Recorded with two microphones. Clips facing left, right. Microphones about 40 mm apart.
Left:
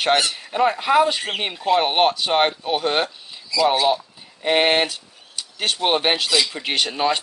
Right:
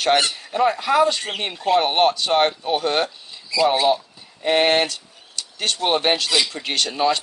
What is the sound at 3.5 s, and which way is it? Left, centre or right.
Speech, right.